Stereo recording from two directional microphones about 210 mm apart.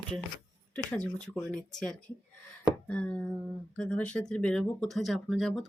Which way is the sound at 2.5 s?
5° left (ahead or behind).